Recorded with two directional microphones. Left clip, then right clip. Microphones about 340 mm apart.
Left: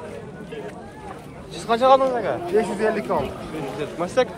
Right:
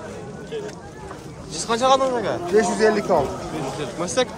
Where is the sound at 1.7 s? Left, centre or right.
Centre.